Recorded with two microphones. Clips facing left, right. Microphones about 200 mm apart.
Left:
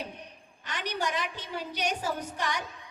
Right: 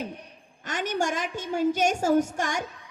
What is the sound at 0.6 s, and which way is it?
A woman's voice, 45° right (ahead or behind).